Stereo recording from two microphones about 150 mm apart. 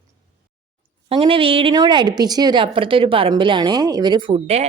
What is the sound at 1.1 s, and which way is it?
A woman's voice, 35° right (ahead or behind).